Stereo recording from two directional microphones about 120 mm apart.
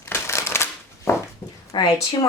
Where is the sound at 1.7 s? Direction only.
40° left (ahead or behind).